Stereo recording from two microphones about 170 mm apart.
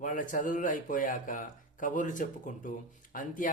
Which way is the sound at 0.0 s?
50° left (ahead or behind).